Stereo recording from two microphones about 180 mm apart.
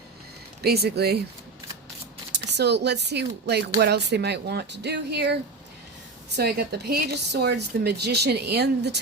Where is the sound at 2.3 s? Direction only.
70° right (ahead or behind).